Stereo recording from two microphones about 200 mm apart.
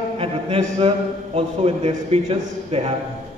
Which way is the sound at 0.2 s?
30° right (ahead or behind).